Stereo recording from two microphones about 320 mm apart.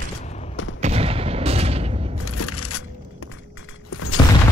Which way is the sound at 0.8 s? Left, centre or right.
Centre.